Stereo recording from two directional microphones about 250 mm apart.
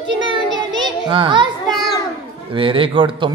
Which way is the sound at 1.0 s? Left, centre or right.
Centre.